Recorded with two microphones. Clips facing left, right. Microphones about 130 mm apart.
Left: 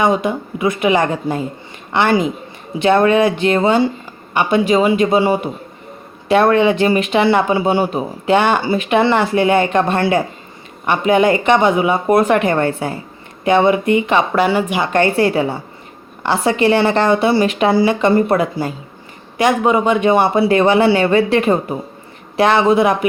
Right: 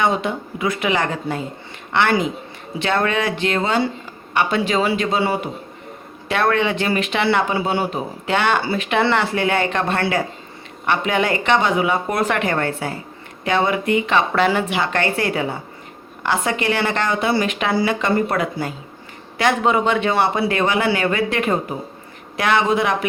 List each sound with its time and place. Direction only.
0.0 s speech: 15° left (ahead or behind)
14.9 s speech: 25° left (ahead or behind)
19.4 s speech: 15° left (ahead or behind)